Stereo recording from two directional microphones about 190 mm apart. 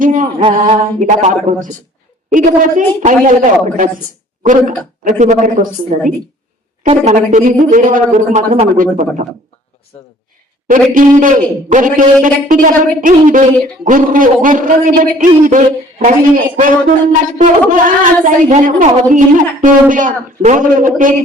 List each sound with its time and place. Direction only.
0.0 s a sound: 45° right (ahead or behind)
0.3 s a man's voice: 30° right (ahead or behind)
5.0 s speech: 40° right (ahead or behind)
9.9 s speech: 35° left (ahead or behind)
10.7 s a man's voice: 45° right (ahead or behind)